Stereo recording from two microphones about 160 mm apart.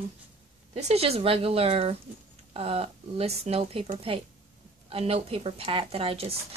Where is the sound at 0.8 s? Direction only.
40° right (ahead or behind).